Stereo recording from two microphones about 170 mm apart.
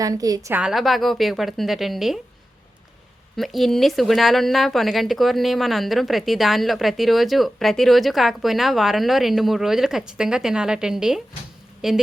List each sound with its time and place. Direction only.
0.0 s a woman's voice: 20° right (ahead or behind)
0.5 s speech: 5° right (ahead or behind)
3.3 s speech: centre (ahead or behind)